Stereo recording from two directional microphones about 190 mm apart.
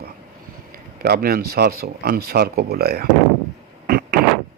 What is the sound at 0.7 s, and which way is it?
Speech, 55° right (ahead or behind).